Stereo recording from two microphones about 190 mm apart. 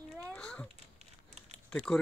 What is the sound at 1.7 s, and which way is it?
Speech, 5° left (ahead or behind).